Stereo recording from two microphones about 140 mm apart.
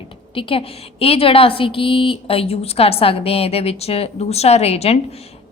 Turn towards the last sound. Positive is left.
turn(degrees=45)  # may be behind; listen again after turning